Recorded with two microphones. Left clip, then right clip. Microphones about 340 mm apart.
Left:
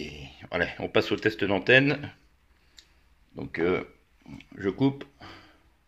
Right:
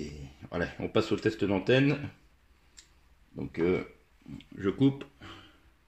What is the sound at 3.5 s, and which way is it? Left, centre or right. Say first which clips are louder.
Speech: left 2 dB; left.